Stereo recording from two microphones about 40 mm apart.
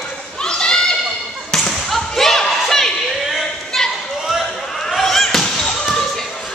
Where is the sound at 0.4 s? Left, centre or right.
Centre.